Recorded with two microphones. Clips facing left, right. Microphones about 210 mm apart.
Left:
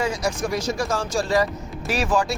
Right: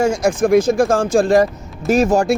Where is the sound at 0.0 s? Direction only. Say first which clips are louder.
Right 9 dB; 50° right (ahead or behind).